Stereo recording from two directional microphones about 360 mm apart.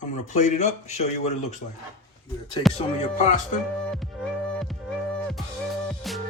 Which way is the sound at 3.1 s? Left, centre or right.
Centre.